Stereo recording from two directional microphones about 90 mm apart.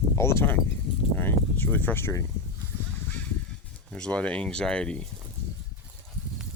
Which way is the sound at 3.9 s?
10° left (ahead or behind).